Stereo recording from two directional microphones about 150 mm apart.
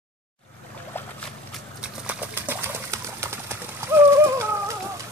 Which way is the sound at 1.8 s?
10° right (ahead or behind).